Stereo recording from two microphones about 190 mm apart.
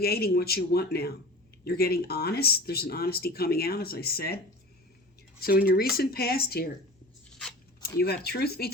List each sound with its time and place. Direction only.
0.0 s speech: 55° left (ahead or behind)
5.4 s speech: 50° left (ahead or behind)
7.9 s speech: 55° left (ahead or behind)